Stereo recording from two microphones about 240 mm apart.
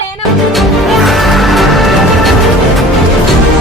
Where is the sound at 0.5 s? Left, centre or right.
Centre.